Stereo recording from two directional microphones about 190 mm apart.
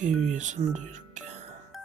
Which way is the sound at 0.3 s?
40° right (ahead or behind).